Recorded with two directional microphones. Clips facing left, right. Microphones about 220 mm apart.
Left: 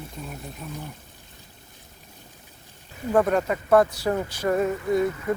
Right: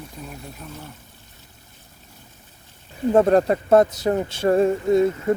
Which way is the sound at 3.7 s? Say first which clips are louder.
Right 3 dB; 20° right (ahead or behind).